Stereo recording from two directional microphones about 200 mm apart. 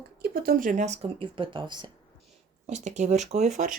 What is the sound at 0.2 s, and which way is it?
Speech, 45° right (ahead or behind).